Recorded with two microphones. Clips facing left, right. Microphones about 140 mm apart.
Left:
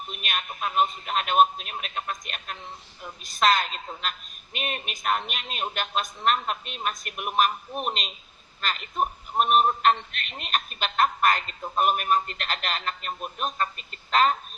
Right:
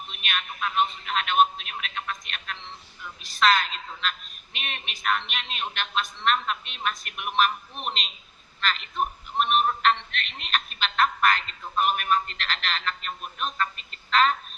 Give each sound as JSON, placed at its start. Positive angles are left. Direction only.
{"t": 0.1, "sound": "a man's voice", "side_deg": 40}